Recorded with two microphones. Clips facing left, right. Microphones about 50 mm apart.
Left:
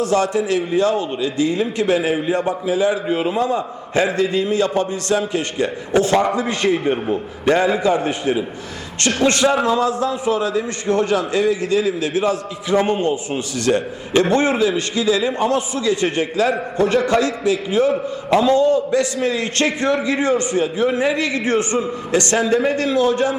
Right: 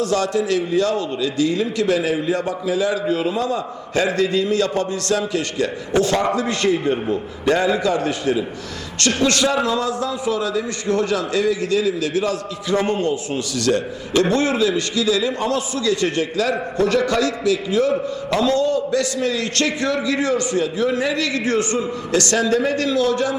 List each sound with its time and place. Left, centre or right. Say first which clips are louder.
0.0 s a man's voice: left 2 dB; left